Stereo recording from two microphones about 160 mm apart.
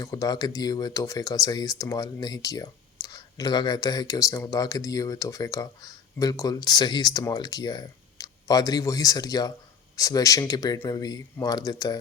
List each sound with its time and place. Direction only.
0.0 s speech: 20° left (ahead or behind)